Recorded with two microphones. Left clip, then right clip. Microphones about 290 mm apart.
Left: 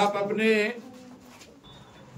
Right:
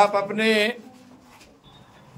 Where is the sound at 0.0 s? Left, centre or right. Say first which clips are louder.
Right 5 dB; centre.